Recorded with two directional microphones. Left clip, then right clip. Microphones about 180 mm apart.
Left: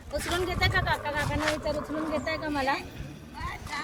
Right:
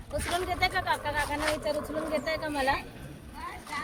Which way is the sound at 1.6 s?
30° right (ahead or behind).